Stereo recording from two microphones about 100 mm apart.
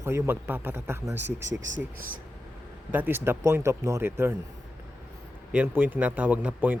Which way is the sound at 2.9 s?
20° right (ahead or behind).